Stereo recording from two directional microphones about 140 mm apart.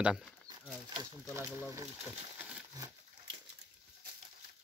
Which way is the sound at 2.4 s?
10° right (ahead or behind).